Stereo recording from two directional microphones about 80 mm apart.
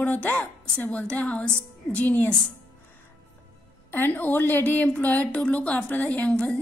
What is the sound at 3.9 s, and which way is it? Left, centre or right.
A woman's voice, left.